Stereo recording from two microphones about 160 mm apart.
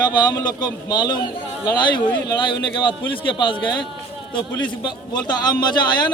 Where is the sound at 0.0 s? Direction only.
25° left (ahead or behind).